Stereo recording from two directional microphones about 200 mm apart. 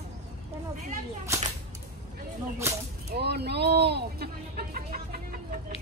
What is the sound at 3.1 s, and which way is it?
A man's voice, 55° right (ahead or behind).